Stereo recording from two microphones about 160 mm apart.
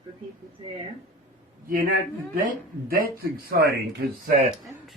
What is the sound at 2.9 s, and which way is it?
Speech, 70° right (ahead or behind).